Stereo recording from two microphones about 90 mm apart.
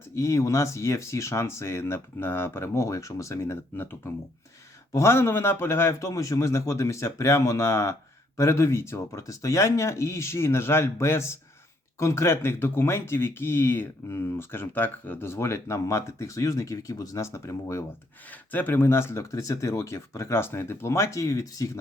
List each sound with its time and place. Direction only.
0.2 s speech: 35° left (ahead or behind)
4.9 s speech: 30° left (ahead or behind)
18.3 s speech: 20° left (ahead or behind); by 21.7 s 40° left (ahead or behind)